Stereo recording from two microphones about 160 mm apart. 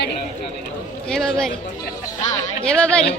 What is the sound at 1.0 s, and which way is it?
Speech, 5° left (ahead or behind).